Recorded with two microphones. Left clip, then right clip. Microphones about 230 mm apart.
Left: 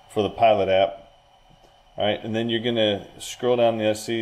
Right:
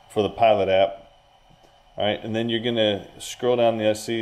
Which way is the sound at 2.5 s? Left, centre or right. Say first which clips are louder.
Even; right.